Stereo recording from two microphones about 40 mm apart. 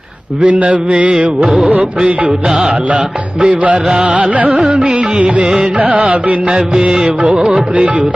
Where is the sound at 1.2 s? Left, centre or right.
Right.